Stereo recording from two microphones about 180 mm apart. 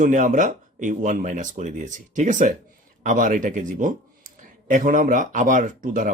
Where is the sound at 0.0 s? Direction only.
45° right (ahead or behind).